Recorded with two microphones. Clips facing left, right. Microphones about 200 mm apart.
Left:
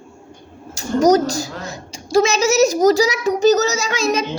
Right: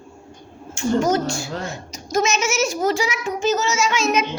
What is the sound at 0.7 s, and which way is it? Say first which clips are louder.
A woman's voice: left 5 dB; 40° left (ahead or behind).